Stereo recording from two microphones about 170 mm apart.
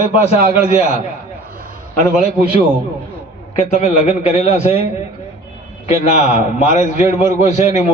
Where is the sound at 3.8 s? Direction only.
40° left (ahead or behind).